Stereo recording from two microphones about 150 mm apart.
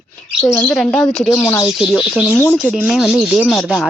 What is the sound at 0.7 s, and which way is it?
Speech, 5° left (ahead or behind).